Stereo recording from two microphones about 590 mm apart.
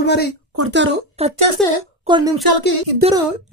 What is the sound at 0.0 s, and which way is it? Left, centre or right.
Speech, centre.